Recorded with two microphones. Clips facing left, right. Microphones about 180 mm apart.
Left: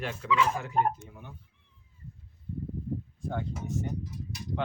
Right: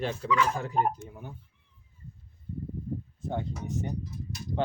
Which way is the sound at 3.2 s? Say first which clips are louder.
Right 3 dB; 20° right (ahead or behind).